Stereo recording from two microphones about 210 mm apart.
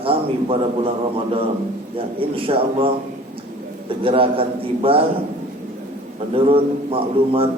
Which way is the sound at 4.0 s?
25° right (ahead or behind).